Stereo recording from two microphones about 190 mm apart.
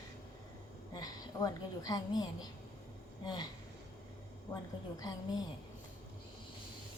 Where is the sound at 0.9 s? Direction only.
20° left (ahead or behind).